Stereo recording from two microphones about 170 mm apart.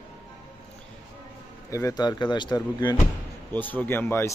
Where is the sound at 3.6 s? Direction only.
10° left (ahead or behind).